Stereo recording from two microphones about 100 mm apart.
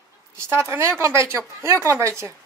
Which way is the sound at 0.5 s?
25° right (ahead or behind).